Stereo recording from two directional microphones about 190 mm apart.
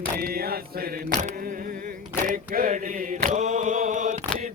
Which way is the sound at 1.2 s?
40° right (ahead or behind).